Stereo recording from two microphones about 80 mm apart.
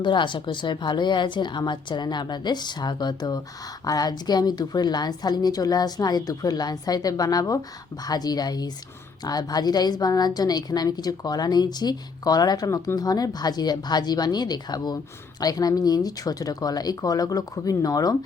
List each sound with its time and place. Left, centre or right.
0.0 s a woman's voice: left